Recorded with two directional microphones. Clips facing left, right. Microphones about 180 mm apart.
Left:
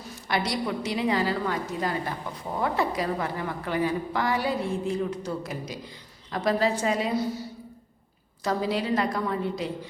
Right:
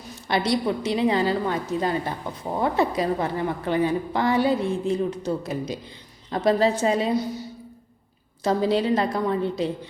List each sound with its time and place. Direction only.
0.3 s a woman's voice: 25° right (ahead or behind)
8.4 s a woman's voice: 25° right (ahead or behind)